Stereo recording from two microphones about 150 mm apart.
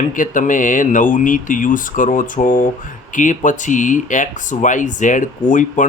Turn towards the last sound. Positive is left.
turn(degrees=60)  # may be behind; listen again after turning